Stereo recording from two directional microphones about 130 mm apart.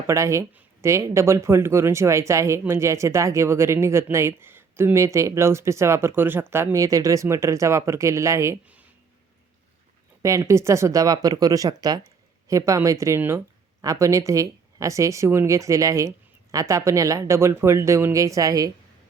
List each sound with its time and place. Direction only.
0.1 s speech: 25° right (ahead or behind)
10.2 s speech: 20° right (ahead or behind)